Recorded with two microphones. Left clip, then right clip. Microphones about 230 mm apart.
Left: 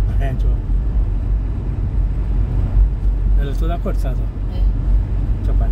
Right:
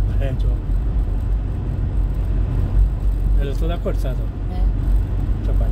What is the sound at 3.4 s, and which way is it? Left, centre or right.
Vehicle, left.